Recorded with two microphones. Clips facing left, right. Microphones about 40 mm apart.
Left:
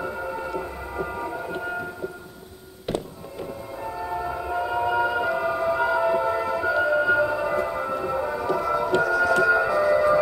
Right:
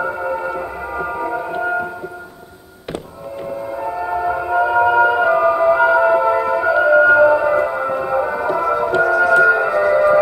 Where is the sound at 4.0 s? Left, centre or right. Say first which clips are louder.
Right 9 dB; right.